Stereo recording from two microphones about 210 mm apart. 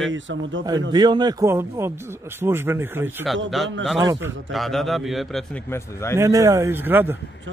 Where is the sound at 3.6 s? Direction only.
Centre (ahead or behind).